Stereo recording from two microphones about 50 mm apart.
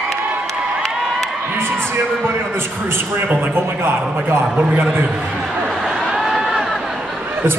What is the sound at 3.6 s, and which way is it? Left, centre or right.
Speech, right.